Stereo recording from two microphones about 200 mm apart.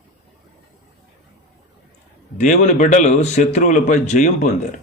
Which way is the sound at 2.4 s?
35° left (ahead or behind).